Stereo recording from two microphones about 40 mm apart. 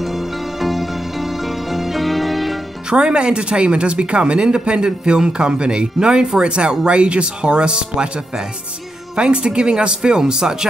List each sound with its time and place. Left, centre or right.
0.0 s music: centre
2.9 s speech: right